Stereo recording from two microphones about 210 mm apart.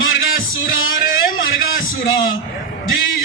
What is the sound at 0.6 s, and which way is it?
Music, 70° left (ahead or behind).